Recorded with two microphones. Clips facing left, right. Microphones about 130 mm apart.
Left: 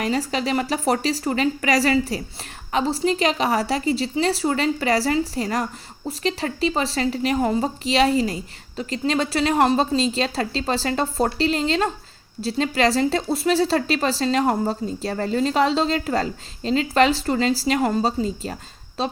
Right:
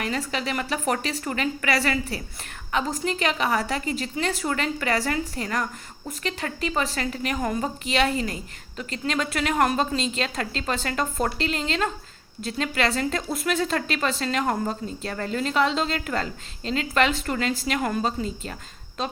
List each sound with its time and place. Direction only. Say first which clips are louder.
0.0 s speech: left 5 dB; 35° left (ahead or behind)